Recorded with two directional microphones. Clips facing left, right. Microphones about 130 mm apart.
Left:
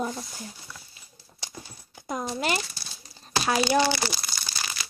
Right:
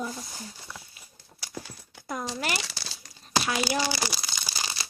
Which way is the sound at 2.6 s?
90° right.